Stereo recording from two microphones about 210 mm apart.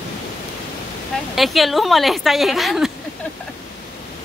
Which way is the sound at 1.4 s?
Centre (ahead or behind).